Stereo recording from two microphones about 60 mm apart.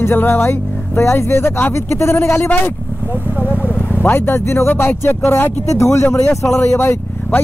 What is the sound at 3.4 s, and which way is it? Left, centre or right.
Speech, right.